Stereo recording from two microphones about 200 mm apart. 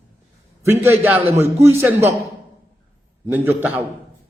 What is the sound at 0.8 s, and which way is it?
Speech, 10° right (ahead or behind).